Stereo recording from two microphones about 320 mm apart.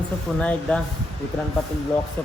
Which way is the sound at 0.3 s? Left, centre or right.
Centre.